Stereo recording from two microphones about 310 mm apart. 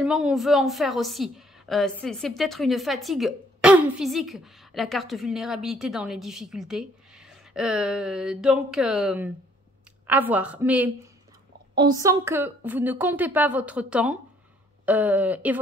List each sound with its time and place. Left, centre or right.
0.0 s a woman's voice: centre